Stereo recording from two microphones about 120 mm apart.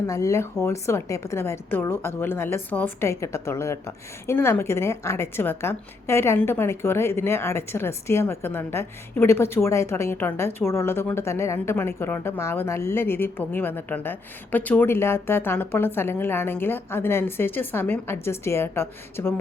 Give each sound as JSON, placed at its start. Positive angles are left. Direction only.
{"t": 0.1, "sound": "a woman's voice", "side_deg": 25}